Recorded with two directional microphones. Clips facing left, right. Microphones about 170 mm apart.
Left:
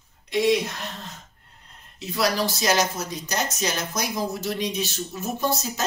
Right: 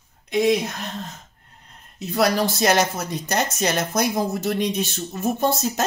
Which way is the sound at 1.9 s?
50° right (ahead or behind).